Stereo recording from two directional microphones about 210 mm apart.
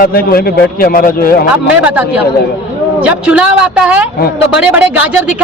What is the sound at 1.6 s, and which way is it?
Speech, 5° right (ahead or behind).